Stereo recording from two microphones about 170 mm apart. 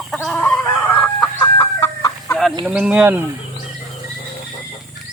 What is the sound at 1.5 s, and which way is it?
Chicken, 20° left (ahead or behind).